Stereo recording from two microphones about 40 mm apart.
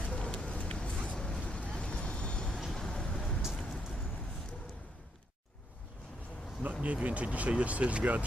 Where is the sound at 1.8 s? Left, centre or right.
Left.